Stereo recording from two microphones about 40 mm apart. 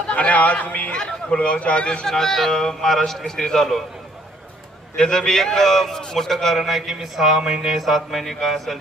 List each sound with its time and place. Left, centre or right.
0.1 s a man's voice: left
0.9 s speech: left
2.0 s a man's voice: centre
4.9 s a man's voice: centre
7.8 s a man's voice: centre